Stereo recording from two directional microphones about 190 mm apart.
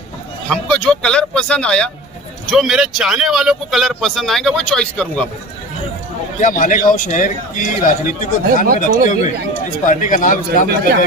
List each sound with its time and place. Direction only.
0.5 s speech: 5° left (ahead or behind)
6.4 s a man's voice: 45° left (ahead or behind)